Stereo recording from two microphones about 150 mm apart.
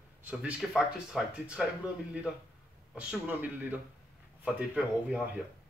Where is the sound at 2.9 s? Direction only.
10° right (ahead or behind).